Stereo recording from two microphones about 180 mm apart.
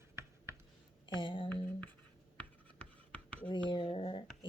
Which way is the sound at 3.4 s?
25° left (ahead or behind).